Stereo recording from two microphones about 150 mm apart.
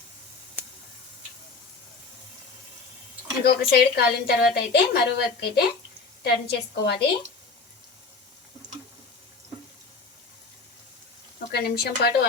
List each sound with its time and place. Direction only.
3.4 s a woman's voice: 90° left
11.5 s a woman's voice: 90° left